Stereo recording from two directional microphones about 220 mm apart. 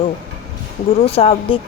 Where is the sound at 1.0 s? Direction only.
25° left (ahead or behind).